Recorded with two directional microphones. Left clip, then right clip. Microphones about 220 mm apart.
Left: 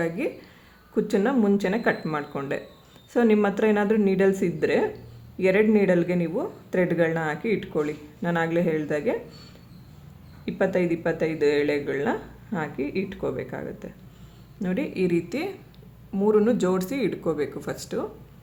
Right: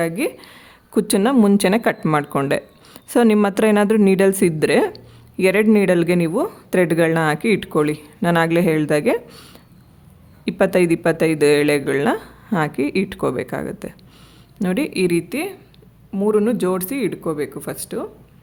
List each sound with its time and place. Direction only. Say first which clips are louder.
0.0 s speech: right 6 dB; 45° right (ahead or behind); by 18.1 s 30° right (ahead or behind)